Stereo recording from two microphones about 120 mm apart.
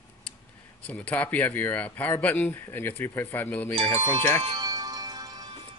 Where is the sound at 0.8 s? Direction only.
10° left (ahead or behind).